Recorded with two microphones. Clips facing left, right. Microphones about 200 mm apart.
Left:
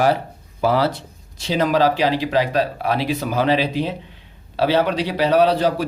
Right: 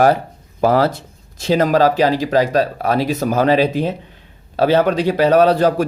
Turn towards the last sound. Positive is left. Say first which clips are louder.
# right 4 dB
turn(degrees=-45)  # may be behind; listen again after turning